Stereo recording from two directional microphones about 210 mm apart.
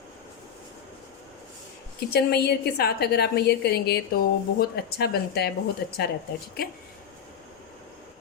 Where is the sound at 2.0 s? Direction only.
50° left (ahead or behind).